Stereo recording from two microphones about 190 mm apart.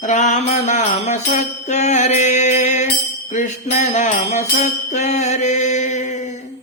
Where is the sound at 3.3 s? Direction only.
40° left (ahead or behind).